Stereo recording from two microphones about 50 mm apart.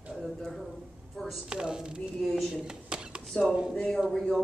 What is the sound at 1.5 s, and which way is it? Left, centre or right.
Speech, centre.